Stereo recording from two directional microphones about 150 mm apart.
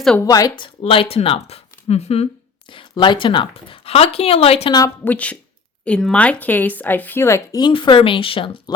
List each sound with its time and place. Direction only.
0.2 s speech: 25° left (ahead or behind); by 2.2 s 45° left (ahead or behind)
2.7 s speech: 30° left (ahead or behind)
5.0 s speech: 10° left (ahead or behind)
7.6 s speech: 30° left (ahead or behind)